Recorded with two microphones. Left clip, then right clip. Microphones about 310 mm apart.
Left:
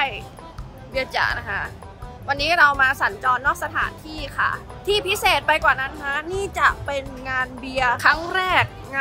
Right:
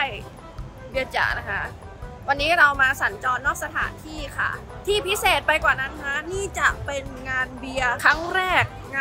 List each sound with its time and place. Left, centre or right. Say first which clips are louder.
0.9 s a woman's voice: left 1 dB; centre